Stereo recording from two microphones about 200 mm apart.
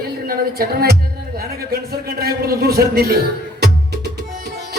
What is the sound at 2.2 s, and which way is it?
A man's voice, 50° right (ahead or behind).